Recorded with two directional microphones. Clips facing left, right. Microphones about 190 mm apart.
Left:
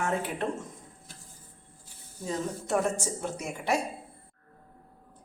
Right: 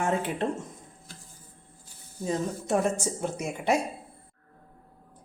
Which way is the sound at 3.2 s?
20° right (ahead or behind).